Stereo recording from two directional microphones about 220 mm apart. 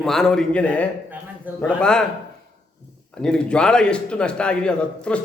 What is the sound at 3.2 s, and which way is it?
A man's voice, 5° left (ahead or behind).